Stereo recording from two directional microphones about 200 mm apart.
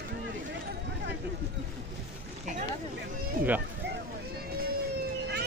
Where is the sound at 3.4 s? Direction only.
45° right (ahead or behind).